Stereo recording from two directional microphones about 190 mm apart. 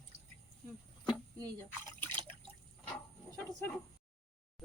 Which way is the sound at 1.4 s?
20° right (ahead or behind).